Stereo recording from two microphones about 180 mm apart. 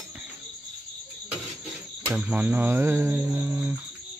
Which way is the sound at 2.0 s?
10° right (ahead or behind).